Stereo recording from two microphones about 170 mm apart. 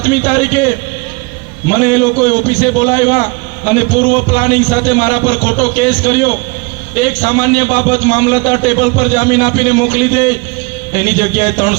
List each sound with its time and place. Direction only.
0.1 s a man's voice: 50° left (ahead or behind)
1.6 s a man's voice: 50° left (ahead or behind)